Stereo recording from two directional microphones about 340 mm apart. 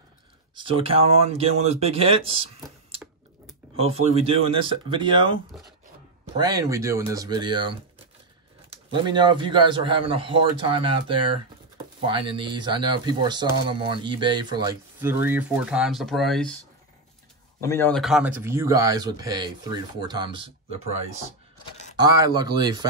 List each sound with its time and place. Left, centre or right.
0.6 s speech: centre
3.7 s speech: centre
6.3 s speech: centre
8.9 s speech: centre
17.6 s speech: centre
21.9 s speech: centre